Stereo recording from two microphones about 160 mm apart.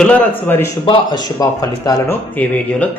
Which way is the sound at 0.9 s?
30° left (ahead or behind).